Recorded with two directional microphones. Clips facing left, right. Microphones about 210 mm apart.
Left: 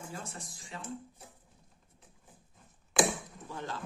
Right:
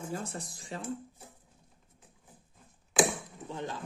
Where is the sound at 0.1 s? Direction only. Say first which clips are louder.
Right 6 dB; 40° right (ahead or behind).